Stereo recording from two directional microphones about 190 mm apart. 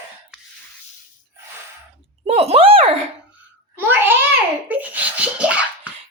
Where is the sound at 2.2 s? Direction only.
30° right (ahead or behind).